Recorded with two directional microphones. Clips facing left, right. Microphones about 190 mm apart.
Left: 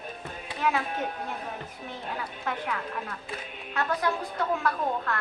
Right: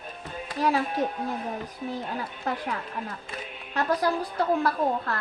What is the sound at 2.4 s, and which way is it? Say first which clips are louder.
A woman's voice: right 1 dB; 35° right (ahead or behind).